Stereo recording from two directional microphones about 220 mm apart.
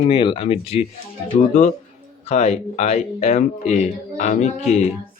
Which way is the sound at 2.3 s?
30° left (ahead or behind).